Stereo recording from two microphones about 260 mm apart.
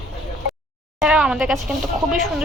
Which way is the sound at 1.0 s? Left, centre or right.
Centre.